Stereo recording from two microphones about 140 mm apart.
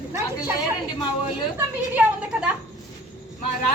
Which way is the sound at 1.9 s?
10° right (ahead or behind).